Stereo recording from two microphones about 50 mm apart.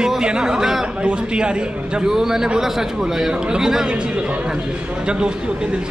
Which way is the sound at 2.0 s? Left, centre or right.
Centre.